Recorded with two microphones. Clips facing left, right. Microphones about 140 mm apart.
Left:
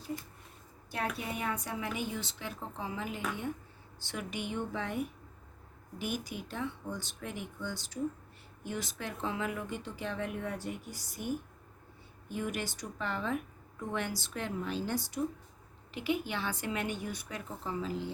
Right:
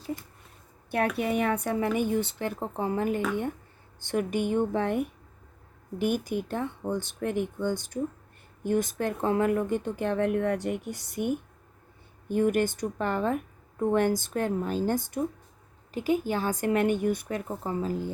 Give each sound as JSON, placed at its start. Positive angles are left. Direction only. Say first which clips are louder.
{"t": 0.9, "sound": "a woman's voice", "louder": "right 10 dB", "side_deg": -60}
{"t": 12.3, "sound": "a woman's voice", "louder": "right 12 dB", "side_deg": -50}